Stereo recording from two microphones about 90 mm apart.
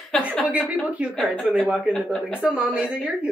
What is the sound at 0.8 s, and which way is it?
Speech, 15° right (ahead or behind).